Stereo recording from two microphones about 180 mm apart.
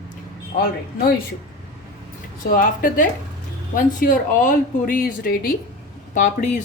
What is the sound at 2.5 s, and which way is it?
A woman's voice, 50° left (ahead or behind).